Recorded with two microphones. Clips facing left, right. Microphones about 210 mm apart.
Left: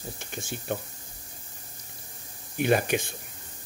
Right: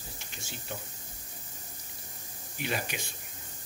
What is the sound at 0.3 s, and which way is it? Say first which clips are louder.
Speech: left 10 dB; 50° left (ahead or behind).